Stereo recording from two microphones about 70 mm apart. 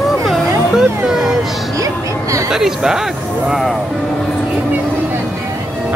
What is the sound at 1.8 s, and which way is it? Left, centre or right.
Music, right.